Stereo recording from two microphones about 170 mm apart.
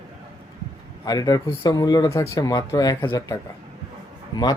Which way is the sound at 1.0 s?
20° left (ahead or behind).